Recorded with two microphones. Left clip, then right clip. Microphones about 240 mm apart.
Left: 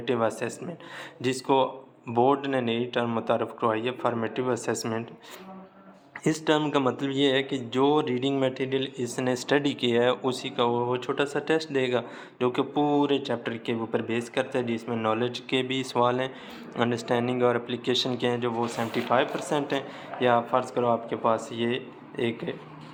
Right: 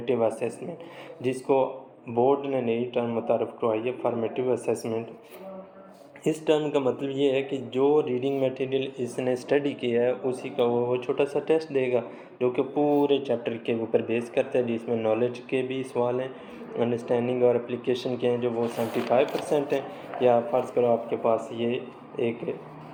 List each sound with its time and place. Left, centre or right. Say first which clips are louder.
0.0 s speech: right 1 dB; left
6.2 s speech: right 1 dB; left